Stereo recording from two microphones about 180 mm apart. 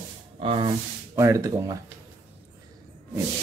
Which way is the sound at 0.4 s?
30° right (ahead or behind).